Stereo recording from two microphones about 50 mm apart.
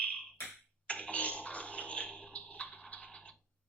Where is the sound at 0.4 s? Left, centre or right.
Left.